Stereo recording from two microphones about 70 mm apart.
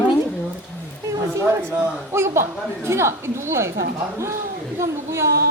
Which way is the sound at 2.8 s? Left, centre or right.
Right.